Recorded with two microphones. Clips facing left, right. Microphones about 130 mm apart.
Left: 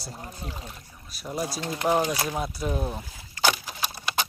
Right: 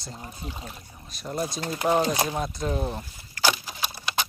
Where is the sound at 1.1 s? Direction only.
5° left (ahead or behind).